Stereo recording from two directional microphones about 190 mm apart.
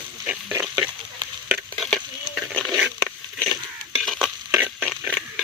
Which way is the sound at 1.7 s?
Centre (ahead or behind).